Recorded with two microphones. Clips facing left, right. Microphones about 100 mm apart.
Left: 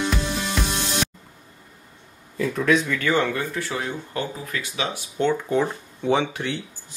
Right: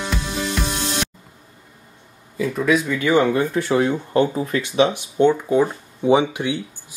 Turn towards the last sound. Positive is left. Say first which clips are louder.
# right 5 dB
turn(degrees=-15)  # may be behind; listen again after turning